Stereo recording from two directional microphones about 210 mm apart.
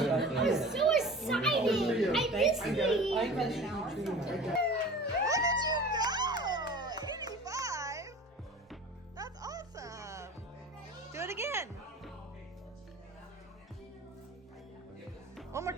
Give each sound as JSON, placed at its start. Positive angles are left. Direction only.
{"t": 0.0, "sound": "music", "side_deg": 0}
{"t": 5.2, "sound": "cat", "side_deg": -15}
{"t": 9.1, "sound": "music", "side_deg": -15}
{"t": 15.5, "sound": "music", "side_deg": -15}